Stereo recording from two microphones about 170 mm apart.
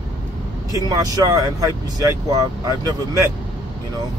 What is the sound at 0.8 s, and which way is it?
Speech, 20° right (ahead or behind).